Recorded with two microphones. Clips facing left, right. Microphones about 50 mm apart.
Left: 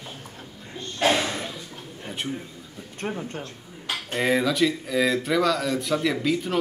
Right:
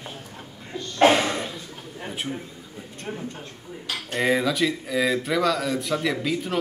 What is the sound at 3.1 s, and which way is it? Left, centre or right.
Speech, left.